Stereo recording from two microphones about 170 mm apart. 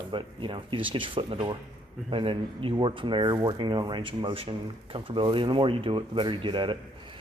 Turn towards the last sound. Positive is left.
turn(degrees=-30)  # may be behind; listen again after turning